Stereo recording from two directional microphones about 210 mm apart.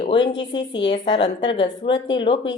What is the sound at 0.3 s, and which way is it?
A woman's voice, 20° left (ahead or behind).